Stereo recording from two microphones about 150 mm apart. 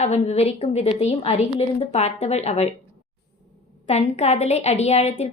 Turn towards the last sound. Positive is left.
turn(degrees=45)  # may be behind; listen again after turning